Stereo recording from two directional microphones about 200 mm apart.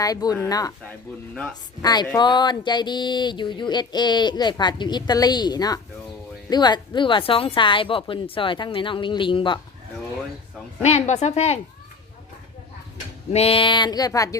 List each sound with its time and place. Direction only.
0.0 s speech: 20° left (ahead or behind)
1.8 s speech: 20° left (ahead or behind)
10.8 s speech: 35° left (ahead or behind)
13.3 s speech: 30° left (ahead or behind)